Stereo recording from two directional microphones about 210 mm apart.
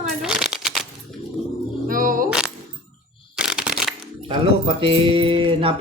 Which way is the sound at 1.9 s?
40° right (ahead or behind).